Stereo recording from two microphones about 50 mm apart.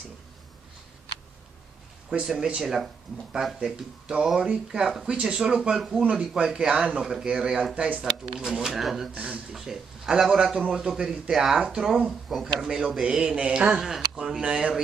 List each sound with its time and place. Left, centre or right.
2.0 s speech: centre
9.1 s speech: right
9.5 s speech: centre
12.1 s speech: centre; by 14.7 s right